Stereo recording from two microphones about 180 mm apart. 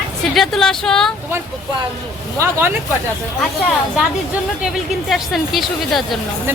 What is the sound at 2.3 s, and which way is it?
Speech, 15° right (ahead or behind).